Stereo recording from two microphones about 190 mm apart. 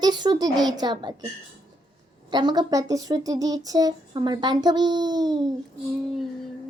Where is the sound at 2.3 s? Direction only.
25° right (ahead or behind).